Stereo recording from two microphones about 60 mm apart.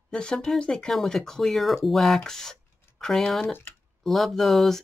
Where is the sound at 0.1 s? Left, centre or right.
Centre.